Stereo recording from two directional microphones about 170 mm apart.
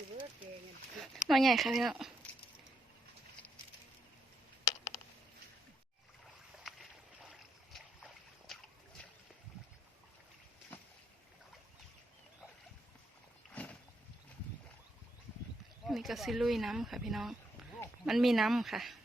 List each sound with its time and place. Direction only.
1.3 s speech: centre (ahead or behind)
4.6 s a sound: 15° left (ahead or behind)
6.7 s boat: centre (ahead or behind)
13.5 s boat: 10° left (ahead or behind)
15.9 s speech: centre (ahead or behind)